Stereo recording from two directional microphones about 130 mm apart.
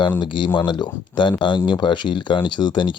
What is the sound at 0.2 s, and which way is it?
Speech, 35° left (ahead or behind).